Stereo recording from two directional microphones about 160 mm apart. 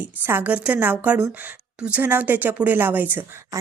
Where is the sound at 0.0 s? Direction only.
10° right (ahead or behind).